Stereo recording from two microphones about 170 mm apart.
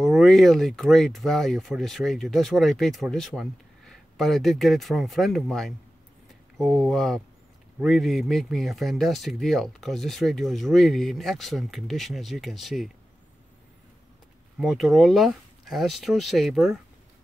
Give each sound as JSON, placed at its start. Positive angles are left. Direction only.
{"t": 0.0, "sound": "speech", "side_deg": 0}
{"t": 6.2, "sound": "a sound", "side_deg": 0}
{"t": 7.8, "sound": "speech", "side_deg": 0}
{"t": 14.6, "sound": "speech", "side_deg": 0}